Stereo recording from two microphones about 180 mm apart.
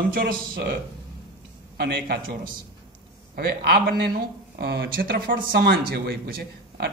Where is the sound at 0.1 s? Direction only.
60° right (ahead or behind).